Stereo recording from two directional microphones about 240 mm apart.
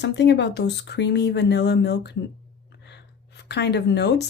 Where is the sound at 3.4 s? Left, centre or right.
Left.